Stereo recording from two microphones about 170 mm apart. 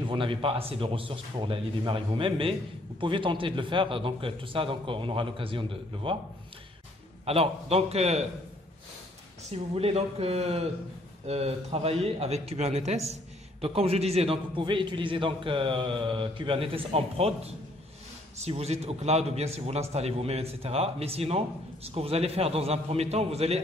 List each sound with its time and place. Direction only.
0.0 s a man's voice: 30° right (ahead or behind)
7.2 s a man's voice: 35° right (ahead or behind)
9.5 s a man's voice: 35° right (ahead or behind)